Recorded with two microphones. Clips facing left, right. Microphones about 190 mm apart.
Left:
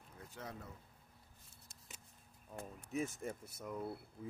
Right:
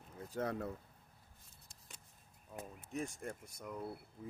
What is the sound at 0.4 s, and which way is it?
Speech, 65° right (ahead or behind).